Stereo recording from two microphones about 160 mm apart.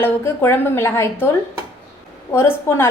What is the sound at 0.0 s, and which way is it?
A woman's voice, 15° left (ahead or behind).